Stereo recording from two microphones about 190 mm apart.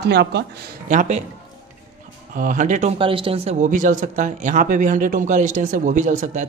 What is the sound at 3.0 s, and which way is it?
Speech, 25° right (ahead or behind).